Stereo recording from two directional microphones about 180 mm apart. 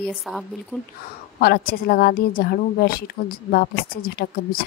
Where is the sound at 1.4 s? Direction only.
55° left (ahead or behind).